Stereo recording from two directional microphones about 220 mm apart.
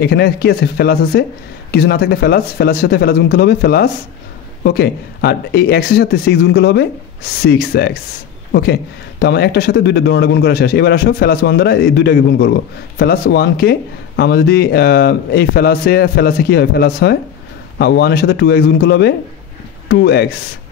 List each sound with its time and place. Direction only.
0.0 s speech: 45° left (ahead or behind)